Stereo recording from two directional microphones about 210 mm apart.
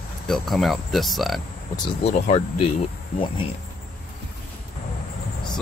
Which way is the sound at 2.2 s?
30° left (ahead or behind).